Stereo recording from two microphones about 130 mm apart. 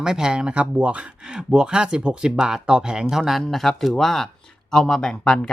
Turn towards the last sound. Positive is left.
turn(degrees=5)  # may be behind; listen again after turning